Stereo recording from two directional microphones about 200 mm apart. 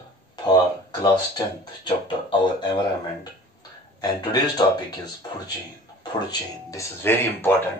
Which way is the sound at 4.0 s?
20° left (ahead or behind).